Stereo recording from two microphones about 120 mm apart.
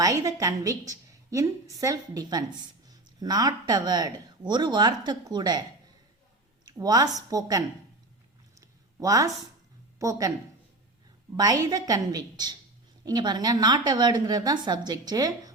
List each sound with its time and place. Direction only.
0.0 s a woman's voice: 30° right (ahead or behind)
6.7 s a woman's voice: 35° right (ahead or behind)
8.5 s a sound: 30° right (ahead or behind)
10.0 s a woman's voice: 25° right (ahead or behind)
11.3 s speech: 30° right (ahead or behind)